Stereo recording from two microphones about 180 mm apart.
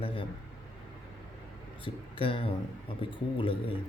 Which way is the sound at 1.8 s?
30° left (ahead or behind).